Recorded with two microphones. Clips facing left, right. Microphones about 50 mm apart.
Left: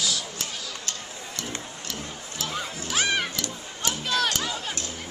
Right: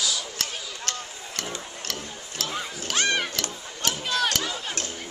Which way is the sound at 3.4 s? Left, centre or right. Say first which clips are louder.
Right 1 dB; right.